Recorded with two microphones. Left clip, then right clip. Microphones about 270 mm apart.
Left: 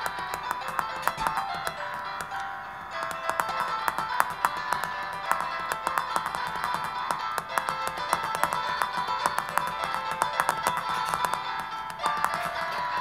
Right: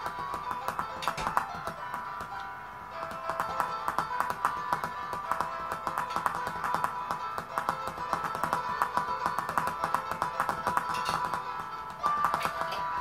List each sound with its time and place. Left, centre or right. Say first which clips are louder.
4.2 s music: left 4 dB; left
10.1 s music: left 5 dB; left